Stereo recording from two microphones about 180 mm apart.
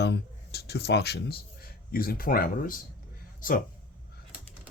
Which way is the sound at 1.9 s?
55° left (ahead or behind).